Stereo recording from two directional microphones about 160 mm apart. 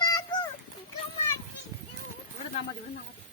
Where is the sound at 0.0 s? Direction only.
25° left (ahead or behind).